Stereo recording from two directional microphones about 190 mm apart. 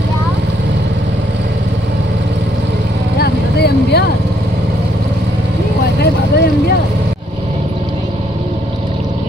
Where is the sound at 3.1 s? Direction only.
55° left (ahead or behind).